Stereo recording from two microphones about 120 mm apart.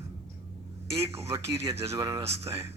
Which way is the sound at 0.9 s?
55° right (ahead or behind).